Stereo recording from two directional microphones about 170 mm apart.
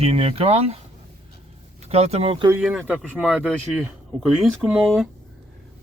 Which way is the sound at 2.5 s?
5° right (ahead or behind).